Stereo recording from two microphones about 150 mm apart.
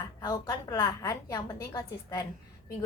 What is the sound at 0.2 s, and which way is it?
A woman's voice, 25° left (ahead or behind).